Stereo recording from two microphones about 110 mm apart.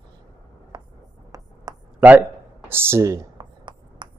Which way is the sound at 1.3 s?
35° right (ahead or behind).